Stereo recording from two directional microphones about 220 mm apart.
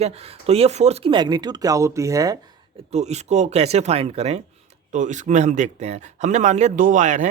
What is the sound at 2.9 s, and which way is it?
Speech, 30° right (ahead or behind).